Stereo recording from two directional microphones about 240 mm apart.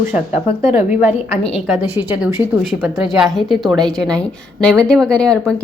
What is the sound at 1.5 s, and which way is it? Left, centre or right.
A woman's voice, centre.